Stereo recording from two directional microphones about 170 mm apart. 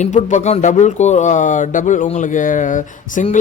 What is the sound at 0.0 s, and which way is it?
Speech, 45° left (ahead or behind).